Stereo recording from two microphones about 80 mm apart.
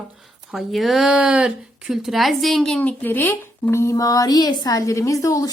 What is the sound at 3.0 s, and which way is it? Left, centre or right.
Speech, left.